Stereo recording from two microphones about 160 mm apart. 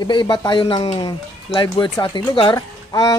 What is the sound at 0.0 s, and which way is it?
Speech, 25° left (ahead or behind).